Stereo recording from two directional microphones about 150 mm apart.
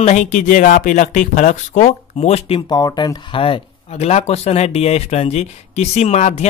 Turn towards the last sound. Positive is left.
turn(degrees=50)  # may be behind; listen again after turning